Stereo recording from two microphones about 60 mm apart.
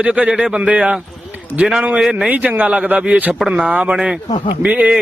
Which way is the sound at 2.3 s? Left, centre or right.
Right.